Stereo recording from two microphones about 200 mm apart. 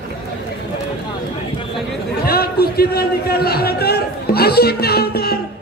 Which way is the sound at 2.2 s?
50° left (ahead or behind).